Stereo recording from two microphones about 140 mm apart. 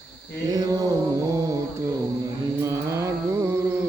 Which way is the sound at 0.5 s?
25° right (ahead or behind).